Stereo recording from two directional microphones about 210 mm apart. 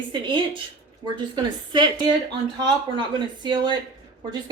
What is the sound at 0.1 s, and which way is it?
A woman's voice, 25° right (ahead or behind).